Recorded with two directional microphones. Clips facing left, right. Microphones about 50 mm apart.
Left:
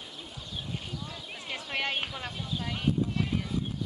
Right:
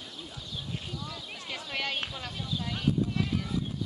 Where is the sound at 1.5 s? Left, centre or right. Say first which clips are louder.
Left 2 dB; centre.